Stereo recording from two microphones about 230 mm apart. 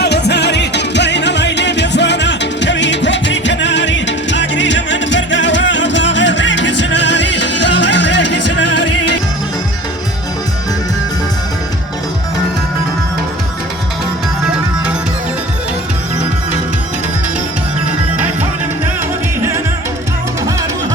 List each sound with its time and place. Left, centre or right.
0.0 s music: left